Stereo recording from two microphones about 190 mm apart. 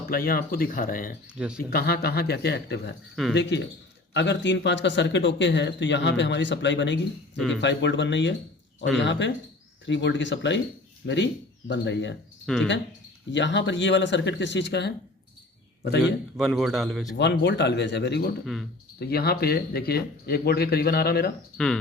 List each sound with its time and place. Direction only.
0.0 s speech: 50° left (ahead or behind)
1.4 s speech: 5° right (ahead or behind)
1.7 s speech: 55° left (ahead or behind)
3.2 s speech: centre (ahead or behind)
4.1 s speech: 65° left (ahead or behind)
13.3 s speech: 70° left (ahead or behind)
16.4 s speech: centre (ahead or behind)
17.2 s speech: 65° left (ahead or behind)
18.4 s speech: centre (ahead or behind)
18.9 s speech: 55° left (ahead or behind)